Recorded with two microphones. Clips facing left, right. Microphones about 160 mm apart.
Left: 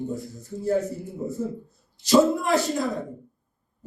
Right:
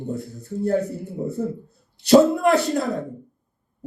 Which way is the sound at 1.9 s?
65° right (ahead or behind).